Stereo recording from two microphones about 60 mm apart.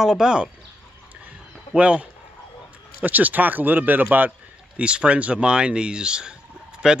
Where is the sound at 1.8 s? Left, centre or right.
Centre.